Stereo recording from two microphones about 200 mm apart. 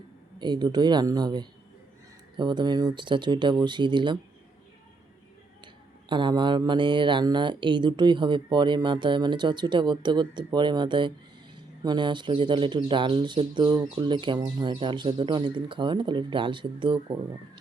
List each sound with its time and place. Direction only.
0.3 s speech: 20° right (ahead or behind)
6.1 s speech: 25° right (ahead or behind)